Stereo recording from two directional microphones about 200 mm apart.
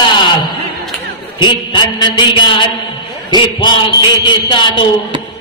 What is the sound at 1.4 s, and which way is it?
A man's voice, 25° left (ahead or behind).